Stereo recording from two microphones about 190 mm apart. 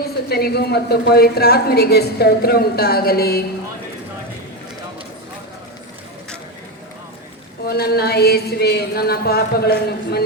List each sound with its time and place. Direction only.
0.3 s a woman's voice: 55° left (ahead or behind)
7.7 s a woman's voice: 55° left (ahead or behind)